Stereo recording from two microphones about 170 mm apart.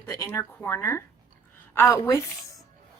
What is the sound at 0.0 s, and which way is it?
A woman's voice, 15° left (ahead or behind).